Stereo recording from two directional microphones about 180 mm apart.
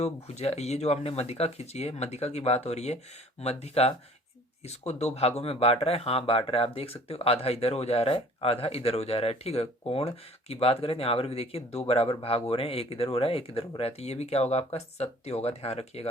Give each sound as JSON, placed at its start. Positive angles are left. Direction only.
{"t": 0.0, "sound": "speech", "side_deg": 35}